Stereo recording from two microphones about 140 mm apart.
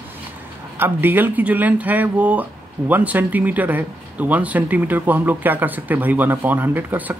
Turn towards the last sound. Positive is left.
turn(degrees=-15)  # may be behind; listen again after turning